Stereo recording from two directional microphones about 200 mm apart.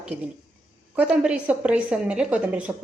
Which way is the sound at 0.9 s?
5° right (ahead or behind).